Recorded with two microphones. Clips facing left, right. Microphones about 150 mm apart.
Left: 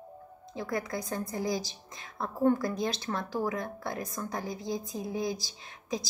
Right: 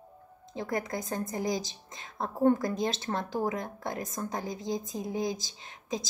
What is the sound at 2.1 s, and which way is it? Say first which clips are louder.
Speech: right 1 dB; 45° right (ahead or behind).